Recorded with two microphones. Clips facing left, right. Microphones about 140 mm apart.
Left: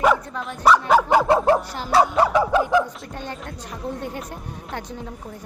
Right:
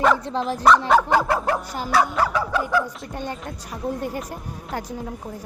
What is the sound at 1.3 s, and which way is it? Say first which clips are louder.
Music: left 6 dB; 25° left (ahead or behind).